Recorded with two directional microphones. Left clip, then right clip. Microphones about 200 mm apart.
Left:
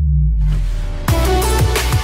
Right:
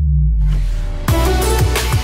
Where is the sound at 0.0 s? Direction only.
Centre (ahead or behind).